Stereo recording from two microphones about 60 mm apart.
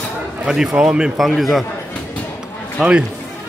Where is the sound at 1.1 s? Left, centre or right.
Centre.